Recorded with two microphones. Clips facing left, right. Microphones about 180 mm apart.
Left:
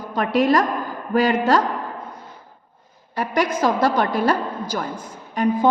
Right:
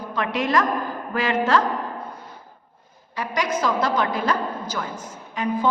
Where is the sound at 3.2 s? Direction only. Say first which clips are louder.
Left 4 dB; 55° left (ahead or behind).